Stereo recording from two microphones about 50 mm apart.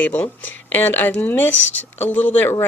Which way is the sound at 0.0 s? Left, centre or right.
Left.